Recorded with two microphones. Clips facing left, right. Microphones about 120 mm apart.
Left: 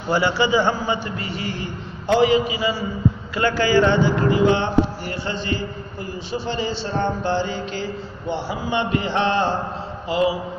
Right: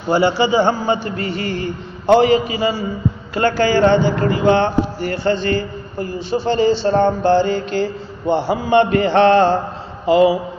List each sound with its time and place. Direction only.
0.1 s a man's voice: 30° right (ahead or behind)
0.7 s a man's voice: 45° right (ahead or behind)
6.9 s mantra: 45° right (ahead or behind); by 10.3 s 65° right (ahead or behind)